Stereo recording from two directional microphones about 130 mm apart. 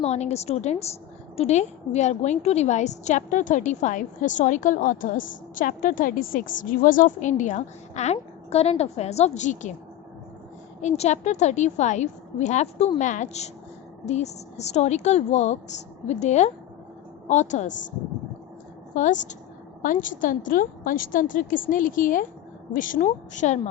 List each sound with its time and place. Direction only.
0.0 s a woman's voice: 55° left (ahead or behind)
10.8 s a woman's voice: 60° left (ahead or behind)
18.9 s a woman's voice: 70° left (ahead or behind)
19.8 s a woman's voice: 90° left
23.0 s a woman's voice: 70° left (ahead or behind)